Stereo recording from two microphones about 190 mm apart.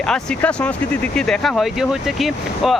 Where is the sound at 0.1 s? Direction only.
5° left (ahead or behind).